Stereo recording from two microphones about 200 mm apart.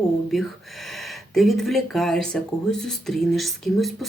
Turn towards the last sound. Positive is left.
turn(degrees=0)  # may be behind; listen again after turning